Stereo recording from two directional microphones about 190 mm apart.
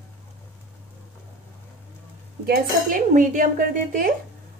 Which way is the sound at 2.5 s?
45° right (ahead or behind).